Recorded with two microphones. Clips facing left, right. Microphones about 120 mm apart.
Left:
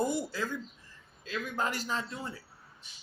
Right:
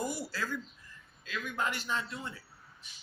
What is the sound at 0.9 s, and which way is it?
A man's voice, 30° left (ahead or behind).